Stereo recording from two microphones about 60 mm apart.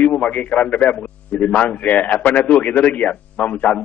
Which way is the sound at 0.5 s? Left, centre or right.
Centre.